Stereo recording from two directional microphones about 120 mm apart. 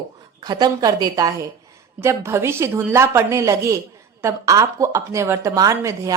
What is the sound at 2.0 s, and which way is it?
Speech, 25° right (ahead or behind).